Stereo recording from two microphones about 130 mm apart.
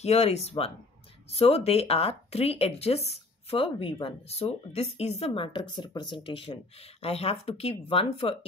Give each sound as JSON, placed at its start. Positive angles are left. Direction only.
{"t": 0.0, "sound": "speech", "side_deg": 55}